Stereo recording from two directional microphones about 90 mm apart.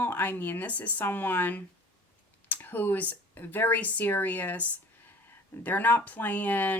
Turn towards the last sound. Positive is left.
turn(degrees=20)  # may be behind; listen again after turning